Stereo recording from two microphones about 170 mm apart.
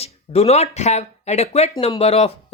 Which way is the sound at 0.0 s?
35° left (ahead or behind).